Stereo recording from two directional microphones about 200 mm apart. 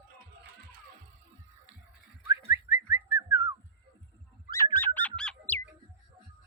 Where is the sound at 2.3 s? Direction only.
15° right (ahead or behind).